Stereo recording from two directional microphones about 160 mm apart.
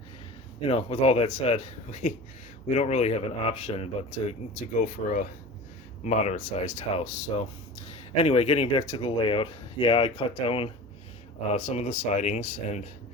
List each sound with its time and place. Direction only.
0.6 s speech: 40° left (ahead or behind)
5.0 s speech: 60° left (ahead or behind); by 10.7 s 35° left (ahead or behind)
11.5 s speech: 45° left (ahead or behind)